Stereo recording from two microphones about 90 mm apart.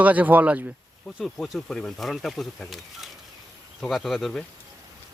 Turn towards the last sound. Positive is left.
turn(degrees=5)  # may be behind; listen again after turning